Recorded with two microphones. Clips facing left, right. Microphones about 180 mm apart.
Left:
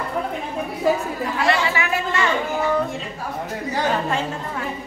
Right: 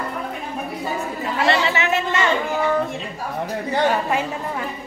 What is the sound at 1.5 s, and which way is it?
Chatter, 25° right (ahead or behind).